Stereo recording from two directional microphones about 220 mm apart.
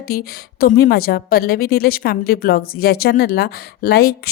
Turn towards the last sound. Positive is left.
turn(degrees=45)  # may be behind; listen again after turning